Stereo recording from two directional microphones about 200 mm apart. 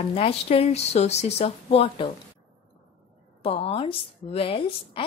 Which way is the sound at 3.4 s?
30° left (ahead or behind).